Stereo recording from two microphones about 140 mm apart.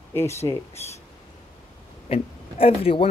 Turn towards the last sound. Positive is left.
turn(degrees=40)  # may be behind; listen again after turning